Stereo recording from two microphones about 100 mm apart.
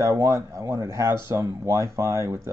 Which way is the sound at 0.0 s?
30° right (ahead or behind).